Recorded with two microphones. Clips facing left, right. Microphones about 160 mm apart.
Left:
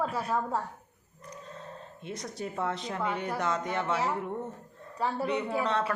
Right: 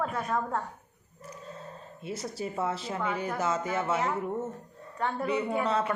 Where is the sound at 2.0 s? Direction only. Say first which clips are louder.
Right 2 dB; 5° right (ahead or behind).